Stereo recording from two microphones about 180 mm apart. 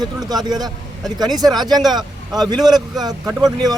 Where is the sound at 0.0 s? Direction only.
20° right (ahead or behind).